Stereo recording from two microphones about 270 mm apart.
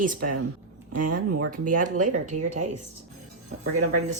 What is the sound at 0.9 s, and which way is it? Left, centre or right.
Speech, right.